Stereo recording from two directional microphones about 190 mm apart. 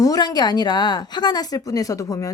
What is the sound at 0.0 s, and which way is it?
Speech, 20° left (ahead or behind).